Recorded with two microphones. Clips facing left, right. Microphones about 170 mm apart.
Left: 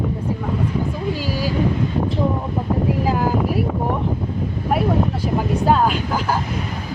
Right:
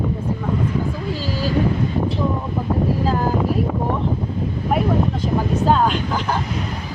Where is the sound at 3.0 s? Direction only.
10° left (ahead or behind).